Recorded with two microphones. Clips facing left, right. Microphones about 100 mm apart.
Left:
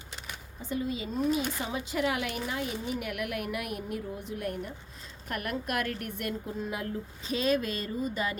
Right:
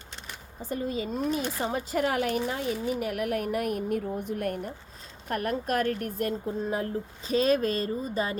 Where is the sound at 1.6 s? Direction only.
45° right (ahead or behind).